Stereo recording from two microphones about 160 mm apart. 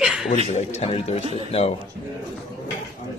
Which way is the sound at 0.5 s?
40° left (ahead or behind).